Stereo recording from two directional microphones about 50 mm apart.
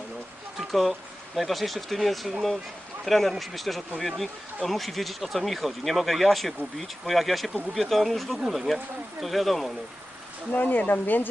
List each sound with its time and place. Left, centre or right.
0.7 s speech: centre
10.5 s speech: left